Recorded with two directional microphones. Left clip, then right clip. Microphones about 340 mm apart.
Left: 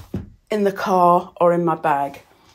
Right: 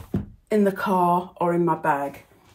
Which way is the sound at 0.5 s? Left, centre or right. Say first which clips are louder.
Left 3 dB; centre.